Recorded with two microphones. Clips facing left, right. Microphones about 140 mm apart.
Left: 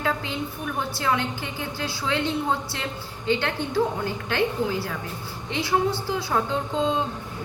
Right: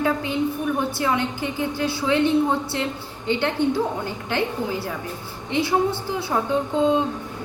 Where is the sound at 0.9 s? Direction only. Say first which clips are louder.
Right 2 dB; 20° right (ahead or behind).